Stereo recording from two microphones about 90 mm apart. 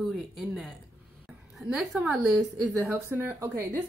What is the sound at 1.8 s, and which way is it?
Speech, 5° right (ahead or behind).